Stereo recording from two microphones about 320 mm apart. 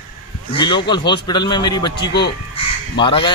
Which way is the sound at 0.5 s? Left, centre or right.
Centre.